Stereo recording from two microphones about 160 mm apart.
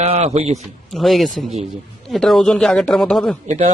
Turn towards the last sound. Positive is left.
turn(degrees=-40)  # may be behind; listen again after turning